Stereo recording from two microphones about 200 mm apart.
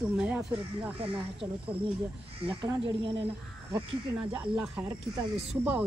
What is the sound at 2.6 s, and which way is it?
Speech, 20° right (ahead or behind).